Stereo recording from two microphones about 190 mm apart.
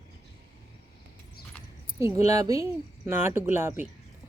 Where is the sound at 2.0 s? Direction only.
15° right (ahead or behind).